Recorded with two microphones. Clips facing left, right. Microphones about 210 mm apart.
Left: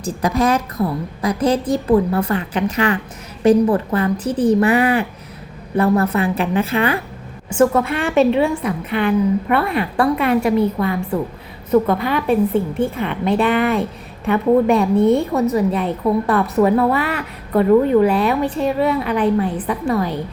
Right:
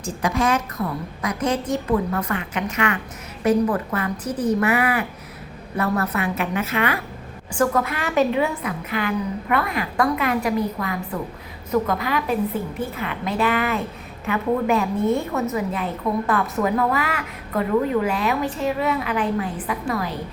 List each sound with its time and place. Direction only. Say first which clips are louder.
0.0 s a woman's voice: left 4 dB; 35° left (ahead or behind)